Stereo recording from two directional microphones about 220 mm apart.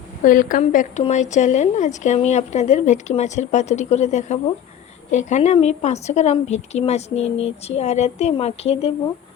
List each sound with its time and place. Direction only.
0.3 s a woman's voice: 40° left (ahead or behind)